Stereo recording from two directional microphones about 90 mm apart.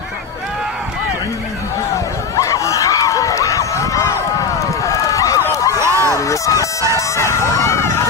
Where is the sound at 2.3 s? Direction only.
35° left (ahead or behind).